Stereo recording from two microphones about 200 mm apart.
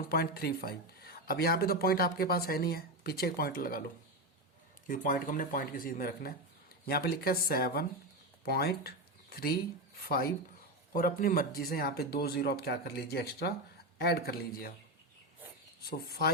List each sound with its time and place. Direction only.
0.1 s speech: 50° left (ahead or behind)
4.9 s speech: 45° left (ahead or behind)
15.8 s speech: 50° left (ahead or behind)